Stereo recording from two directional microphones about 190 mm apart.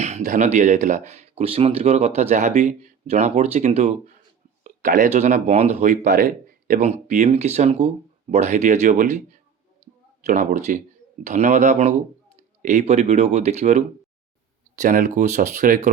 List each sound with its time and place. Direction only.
0.0 s speech: 35° right (ahead or behind)
10.2 s speech: 40° right (ahead or behind)